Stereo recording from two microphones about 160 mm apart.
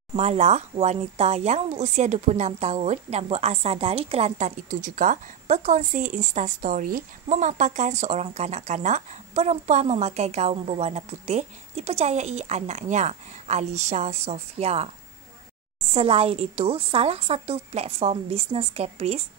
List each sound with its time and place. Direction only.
0.1 s speech: 40° right (ahead or behind)
15.9 s a woman's voice: 40° right (ahead or behind)